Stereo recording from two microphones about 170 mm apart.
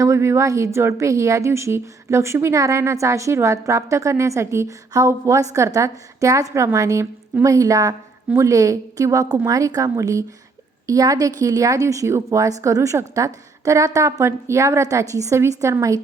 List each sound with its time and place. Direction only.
0.0 s a woman's voice: 15° right (ahead or behind)